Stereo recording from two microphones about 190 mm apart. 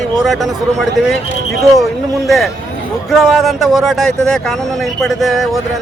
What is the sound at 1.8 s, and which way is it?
Speech, centre (ahead or behind).